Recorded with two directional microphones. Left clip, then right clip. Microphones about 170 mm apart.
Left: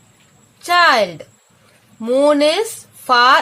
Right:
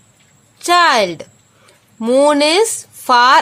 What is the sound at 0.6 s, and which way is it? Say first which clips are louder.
A woman's voice: right 1 dB; 70° right (ahead or behind).